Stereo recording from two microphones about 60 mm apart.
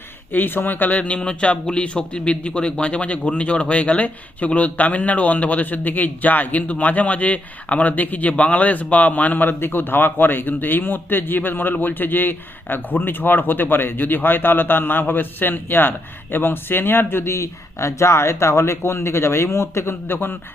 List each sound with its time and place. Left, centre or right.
0.3 s speech: left
17.3 s speech: left